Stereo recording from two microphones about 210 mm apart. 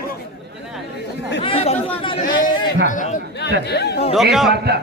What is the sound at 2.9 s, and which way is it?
Speech, 40° left (ahead or behind).